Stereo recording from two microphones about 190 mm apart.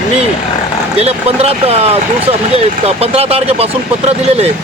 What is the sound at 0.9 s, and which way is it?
Speech, 30° right (ahead or behind).